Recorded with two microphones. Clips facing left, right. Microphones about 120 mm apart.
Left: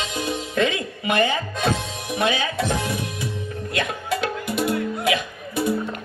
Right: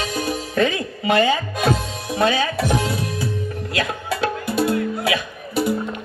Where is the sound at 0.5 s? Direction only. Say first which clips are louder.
Right 2 dB; 35° right (ahead or behind).